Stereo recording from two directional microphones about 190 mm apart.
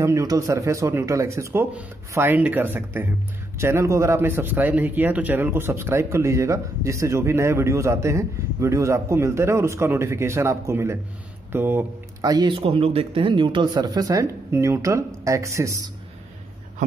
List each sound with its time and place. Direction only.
0.0 s speech: 15° right (ahead or behind)